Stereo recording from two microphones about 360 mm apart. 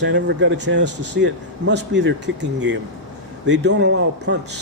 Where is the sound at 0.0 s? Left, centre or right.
Right.